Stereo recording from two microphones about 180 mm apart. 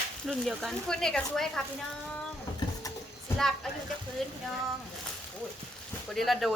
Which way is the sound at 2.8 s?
20° left (ahead or behind).